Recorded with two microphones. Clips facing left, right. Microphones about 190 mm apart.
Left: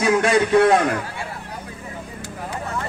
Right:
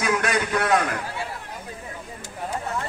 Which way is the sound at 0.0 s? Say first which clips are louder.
Left 6 dB; 30° left (ahead or behind).